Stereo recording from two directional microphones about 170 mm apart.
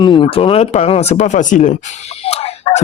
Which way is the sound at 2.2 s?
35° left (ahead or behind).